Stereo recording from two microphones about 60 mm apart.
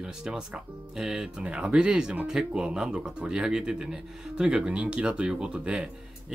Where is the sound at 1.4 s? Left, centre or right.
Centre.